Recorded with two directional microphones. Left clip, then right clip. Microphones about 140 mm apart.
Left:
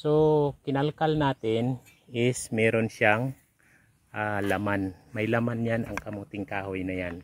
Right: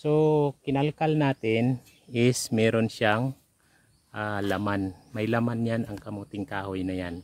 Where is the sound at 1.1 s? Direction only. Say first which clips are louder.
Right 1 dB; 35° right (ahead or behind).